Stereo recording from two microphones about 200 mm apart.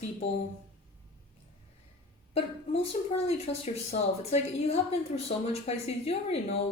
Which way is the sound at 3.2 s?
30° left (ahead or behind).